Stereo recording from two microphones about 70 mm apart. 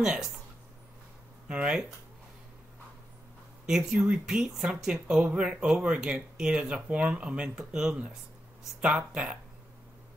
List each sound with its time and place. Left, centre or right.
0.0 s speech: centre
1.5 s speech: centre
3.6 s speech: centre
5.0 s speech: centre